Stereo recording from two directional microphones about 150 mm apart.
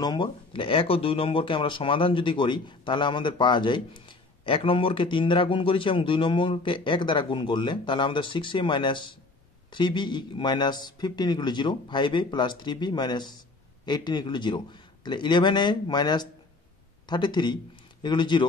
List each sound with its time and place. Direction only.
0.0 s speech: 30° left (ahead or behind)